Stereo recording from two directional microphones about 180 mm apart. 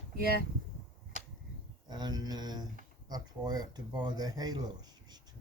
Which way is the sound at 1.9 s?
20° right (ahead or behind).